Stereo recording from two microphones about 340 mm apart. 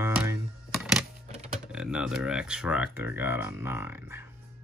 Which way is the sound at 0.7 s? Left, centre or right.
Centre.